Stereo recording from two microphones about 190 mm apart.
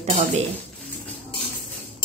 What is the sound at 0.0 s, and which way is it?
Speech, 35° right (ahead or behind).